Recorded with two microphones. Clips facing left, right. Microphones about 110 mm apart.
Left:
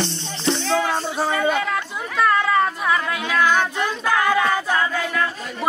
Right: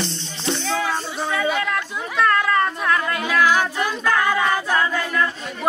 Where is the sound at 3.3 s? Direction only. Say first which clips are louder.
Even; 5° right (ahead or behind).